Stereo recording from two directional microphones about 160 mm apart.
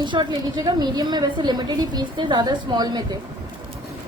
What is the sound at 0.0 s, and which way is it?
A woman's voice, 30° right (ahead or behind).